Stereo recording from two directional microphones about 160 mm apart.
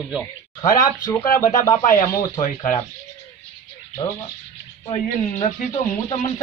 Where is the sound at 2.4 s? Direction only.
55° left (ahead or behind).